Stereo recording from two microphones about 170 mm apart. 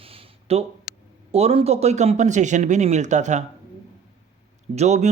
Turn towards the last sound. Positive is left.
turn(degrees=-40)  # may be behind; listen again after turning